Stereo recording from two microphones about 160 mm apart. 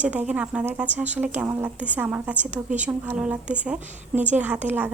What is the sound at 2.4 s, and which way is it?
Speech, 50° right (ahead or behind).